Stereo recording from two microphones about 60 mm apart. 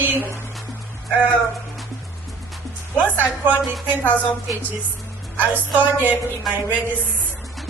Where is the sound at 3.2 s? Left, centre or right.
Right.